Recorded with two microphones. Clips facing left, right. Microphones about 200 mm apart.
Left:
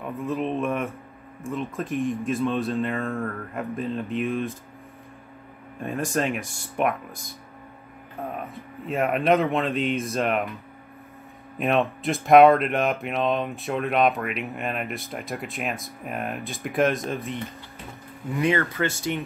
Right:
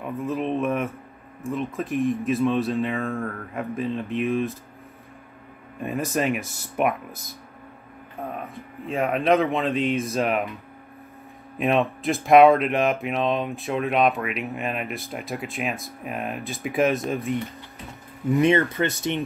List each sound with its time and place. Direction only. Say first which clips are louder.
0.0 s speech: right 1 dB; centre (ahead or behind)
5.9 s speech: right 1 dB; 5° right (ahead or behind)
8.2 s speech: even; centre (ahead or behind)
11.5 s speech: right 1 dB; centre (ahead or behind)
18.4 s speech: right 2 dB; 25° right (ahead or behind)